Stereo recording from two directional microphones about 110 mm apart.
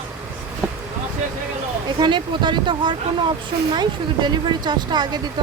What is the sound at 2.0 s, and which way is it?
Speech, 45° right (ahead or behind).